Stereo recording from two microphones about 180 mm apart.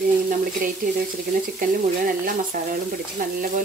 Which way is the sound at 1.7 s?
50° right (ahead or behind).